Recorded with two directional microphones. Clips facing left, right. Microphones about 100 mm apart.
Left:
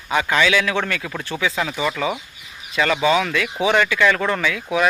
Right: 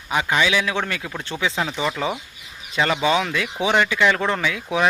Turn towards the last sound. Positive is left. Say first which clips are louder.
# left 1 dB
turn(degrees=-20)  # may be behind; listen again after turning